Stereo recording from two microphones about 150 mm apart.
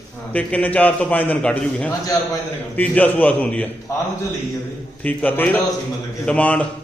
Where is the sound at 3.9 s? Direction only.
20° left (ahead or behind).